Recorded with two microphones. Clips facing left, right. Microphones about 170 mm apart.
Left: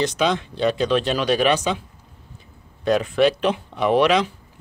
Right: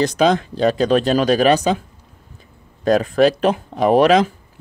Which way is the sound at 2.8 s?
40° right (ahead or behind).